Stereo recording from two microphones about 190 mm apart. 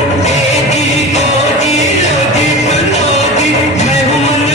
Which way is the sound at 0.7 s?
35° left (ahead or behind).